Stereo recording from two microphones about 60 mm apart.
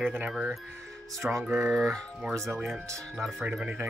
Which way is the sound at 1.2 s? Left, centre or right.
Centre.